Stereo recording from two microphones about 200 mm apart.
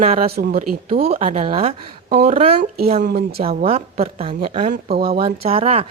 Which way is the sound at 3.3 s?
30° right (ahead or behind).